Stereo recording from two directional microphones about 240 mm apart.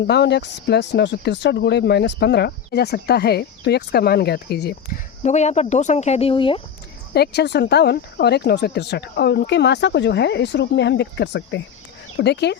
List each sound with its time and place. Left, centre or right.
0.1 s speech: left
5.2 s speech: left
7.1 s speech: left